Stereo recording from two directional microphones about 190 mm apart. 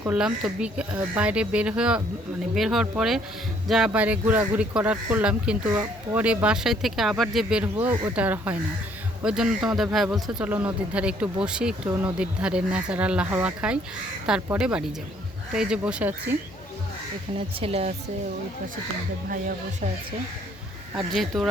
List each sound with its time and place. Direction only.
0.0 s a man's voice: 5° right (ahead or behind)
17.3 s speech: 30° right (ahead or behind)
21.1 s a man's voice: centre (ahead or behind)